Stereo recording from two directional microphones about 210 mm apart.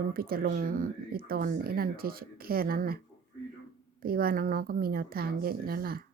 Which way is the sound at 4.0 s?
45° right (ahead or behind).